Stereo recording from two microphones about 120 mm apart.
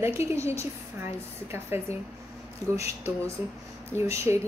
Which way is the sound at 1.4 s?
20° right (ahead or behind).